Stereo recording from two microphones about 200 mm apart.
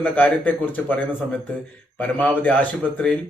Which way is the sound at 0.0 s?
5° left (ahead or behind).